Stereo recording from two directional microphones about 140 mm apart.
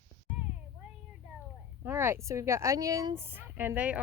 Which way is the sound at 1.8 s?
15° right (ahead or behind).